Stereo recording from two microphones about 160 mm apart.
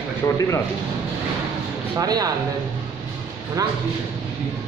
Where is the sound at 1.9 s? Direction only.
25° right (ahead or behind).